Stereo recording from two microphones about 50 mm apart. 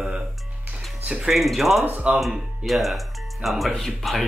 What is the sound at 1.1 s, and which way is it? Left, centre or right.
Speech, centre.